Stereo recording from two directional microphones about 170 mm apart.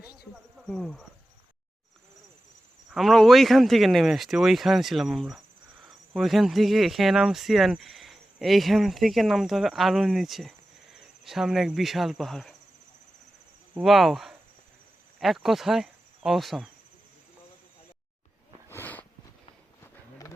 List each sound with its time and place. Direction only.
0.5 s speech: 5° left (ahead or behind)
2.9 s speech: centre (ahead or behind)
13.8 s speech: centre (ahead or behind)
15.2 s cricket: centre (ahead or behind)
18.7 s a sound: 10° left (ahead or behind)